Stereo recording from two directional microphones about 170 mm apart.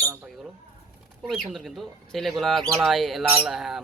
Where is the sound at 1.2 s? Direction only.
Centre (ahead or behind).